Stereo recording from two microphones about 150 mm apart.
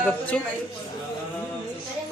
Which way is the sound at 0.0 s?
5° left (ahead or behind).